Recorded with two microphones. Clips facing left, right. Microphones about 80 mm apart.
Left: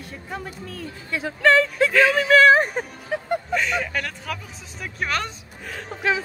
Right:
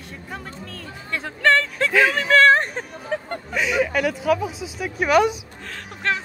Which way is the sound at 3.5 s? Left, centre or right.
Centre.